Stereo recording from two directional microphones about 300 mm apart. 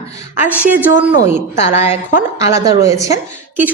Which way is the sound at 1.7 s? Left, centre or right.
Left.